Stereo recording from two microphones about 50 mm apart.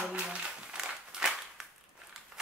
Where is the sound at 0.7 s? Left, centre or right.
Centre.